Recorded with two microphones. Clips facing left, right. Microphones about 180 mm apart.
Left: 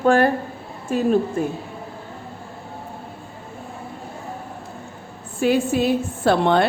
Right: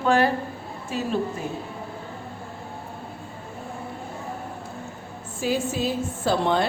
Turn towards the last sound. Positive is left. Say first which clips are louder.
# left 5 dB
turn(degrees=65)  # may be behind; listen again after turning